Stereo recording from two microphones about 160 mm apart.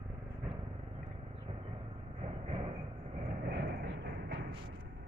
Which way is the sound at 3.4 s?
80° right.